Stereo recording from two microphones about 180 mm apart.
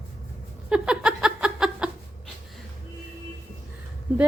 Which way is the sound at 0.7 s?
5° right (ahead or behind).